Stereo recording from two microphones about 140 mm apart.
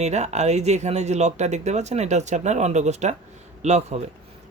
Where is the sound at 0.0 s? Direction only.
50° right (ahead or behind).